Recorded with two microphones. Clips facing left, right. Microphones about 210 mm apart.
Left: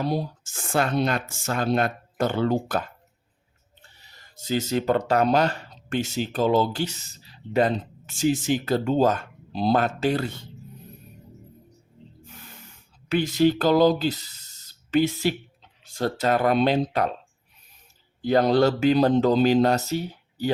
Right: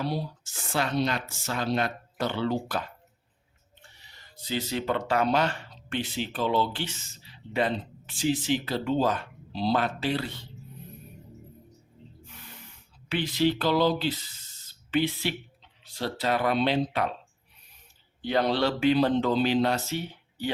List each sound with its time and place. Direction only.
0.0 s speech: 45° left (ahead or behind)
4.4 s speech: 45° left (ahead or behind)
13.1 s speech: 45° left (ahead or behind)
18.2 s speech: 45° left (ahead or behind)